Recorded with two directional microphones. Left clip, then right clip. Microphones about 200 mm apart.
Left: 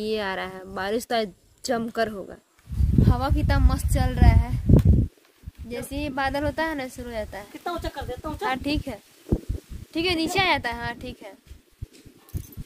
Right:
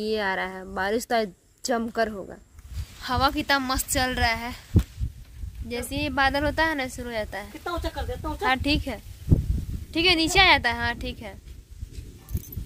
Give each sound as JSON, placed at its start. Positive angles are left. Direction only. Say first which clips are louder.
{"t": 0.0, "sound": "a woman's voice", "louder": "right 1 dB", "side_deg": 0}
{"t": 3.0, "sound": "a woman's voice", "louder": "right 3 dB", "side_deg": -5}
{"t": 5.7, "sound": "a woman's voice", "louder": "right 2 dB", "side_deg": 0}
{"t": 7.6, "sound": "speech", "louder": "left 1 dB", "side_deg": 25}
{"t": 8.5, "sound": "a woman's voice", "louder": "right 3 dB", "side_deg": 0}